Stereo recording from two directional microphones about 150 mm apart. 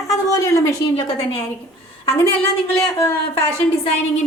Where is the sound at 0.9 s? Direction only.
45° left (ahead or behind).